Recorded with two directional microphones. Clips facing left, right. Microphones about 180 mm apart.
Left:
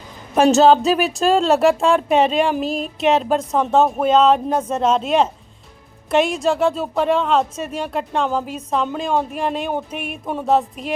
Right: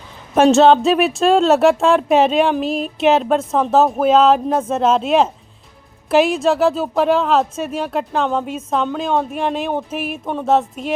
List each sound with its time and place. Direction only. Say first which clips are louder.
0.3 s speech: right 2 dB; centre (ahead or behind)